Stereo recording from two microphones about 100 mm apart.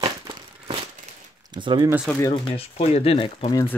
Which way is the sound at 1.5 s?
50° right (ahead or behind).